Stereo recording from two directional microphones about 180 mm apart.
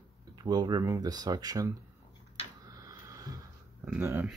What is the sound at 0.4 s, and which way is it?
Speech, 25° right (ahead or behind).